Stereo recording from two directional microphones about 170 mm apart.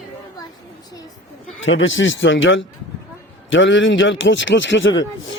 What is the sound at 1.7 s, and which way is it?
A man's voice, 90° left.